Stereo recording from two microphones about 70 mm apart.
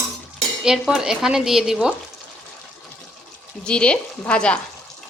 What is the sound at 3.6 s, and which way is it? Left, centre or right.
Speech, centre.